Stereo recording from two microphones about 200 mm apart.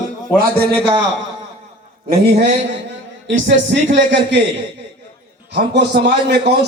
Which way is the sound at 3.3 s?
65° right (ahead or behind).